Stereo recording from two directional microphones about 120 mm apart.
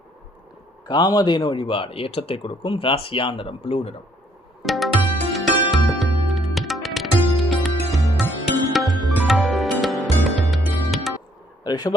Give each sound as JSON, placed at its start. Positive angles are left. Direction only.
{"t": 0.9, "sound": "a man's voice", "side_deg": 40}
{"t": 4.6, "sound": "music", "side_deg": 0}
{"t": 11.6, "sound": "speech", "side_deg": 35}